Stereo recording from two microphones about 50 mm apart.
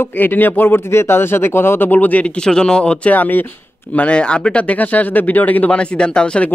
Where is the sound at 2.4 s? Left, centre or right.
Centre.